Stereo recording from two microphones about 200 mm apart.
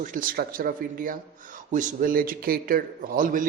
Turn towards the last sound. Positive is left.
turn(degrees=-40)  # may be behind; listen again after turning